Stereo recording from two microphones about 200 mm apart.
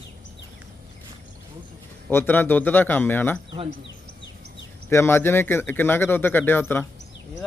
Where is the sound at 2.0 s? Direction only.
10° left (ahead or behind).